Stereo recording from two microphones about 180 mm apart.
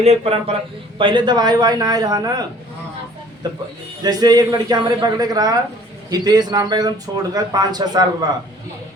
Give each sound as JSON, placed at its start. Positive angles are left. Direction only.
{"t": 0.0, "sound": "a man's voice", "side_deg": -35}
{"t": 4.0, "sound": "a man's voice", "side_deg": -20}